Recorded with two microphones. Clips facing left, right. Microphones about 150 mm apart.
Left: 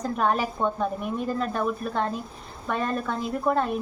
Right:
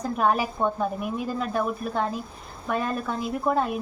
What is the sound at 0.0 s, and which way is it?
A woman's voice, 5° right (ahead or behind).